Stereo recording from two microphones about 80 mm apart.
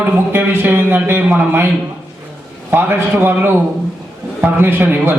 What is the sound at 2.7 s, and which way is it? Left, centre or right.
A man's voice, right.